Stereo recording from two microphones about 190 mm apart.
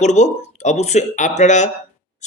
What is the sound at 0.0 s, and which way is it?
Speech, 35° left (ahead or behind).